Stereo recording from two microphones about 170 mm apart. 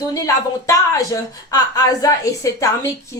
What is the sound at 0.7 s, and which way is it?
A woman's voice, 20° left (ahead or behind).